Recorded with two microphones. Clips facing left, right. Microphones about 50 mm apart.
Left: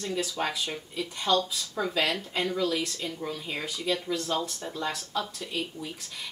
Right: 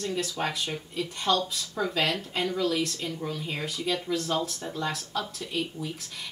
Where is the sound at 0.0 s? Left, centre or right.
Centre.